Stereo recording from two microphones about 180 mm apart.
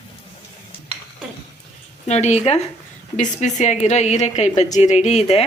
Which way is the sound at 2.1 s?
40° left (ahead or behind).